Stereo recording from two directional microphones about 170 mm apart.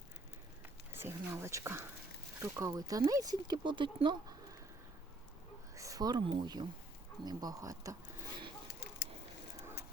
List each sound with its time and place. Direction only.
0.9 s speech: 15° right (ahead or behind)
5.7 s speech: 20° right (ahead or behind)